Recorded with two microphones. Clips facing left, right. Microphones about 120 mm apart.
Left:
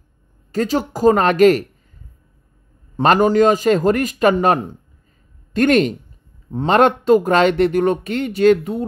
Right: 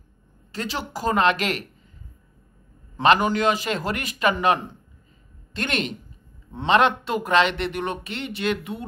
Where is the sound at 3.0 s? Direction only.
40° left (ahead or behind).